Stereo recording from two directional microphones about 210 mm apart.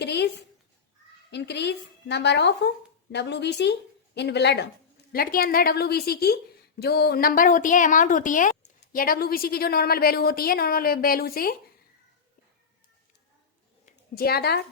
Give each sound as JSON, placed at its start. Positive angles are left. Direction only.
{"t": 0.0, "sound": "a sound", "side_deg": 55}
{"t": 1.3, "sound": "a woman's voice", "side_deg": 55}
{"t": 14.2, "sound": "a woman's voice", "side_deg": 45}